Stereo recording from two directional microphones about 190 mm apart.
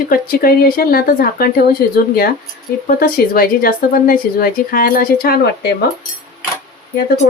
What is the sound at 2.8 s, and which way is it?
A woman's voice, 50° left (ahead or behind).